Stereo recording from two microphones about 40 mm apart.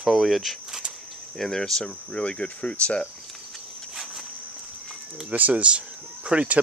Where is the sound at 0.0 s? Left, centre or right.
Centre.